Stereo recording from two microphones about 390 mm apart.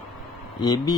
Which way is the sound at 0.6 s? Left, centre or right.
Centre.